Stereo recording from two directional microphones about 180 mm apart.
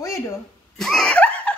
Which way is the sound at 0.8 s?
Centre (ahead or behind).